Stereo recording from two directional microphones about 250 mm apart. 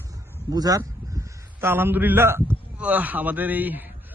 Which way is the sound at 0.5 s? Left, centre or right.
Centre.